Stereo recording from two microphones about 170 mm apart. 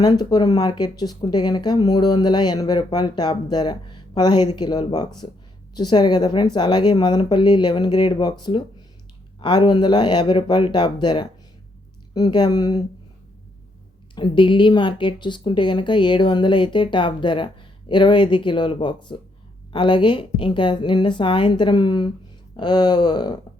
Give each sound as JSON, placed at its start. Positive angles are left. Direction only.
{"t": 0.0, "sound": "speech", "side_deg": 25}
{"t": 14.2, "sound": "speech", "side_deg": 30}